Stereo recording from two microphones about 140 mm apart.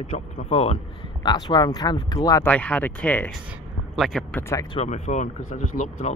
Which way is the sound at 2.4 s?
10° left (ahead or behind).